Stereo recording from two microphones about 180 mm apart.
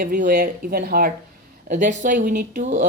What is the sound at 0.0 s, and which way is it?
Speech, 50° right (ahead or behind).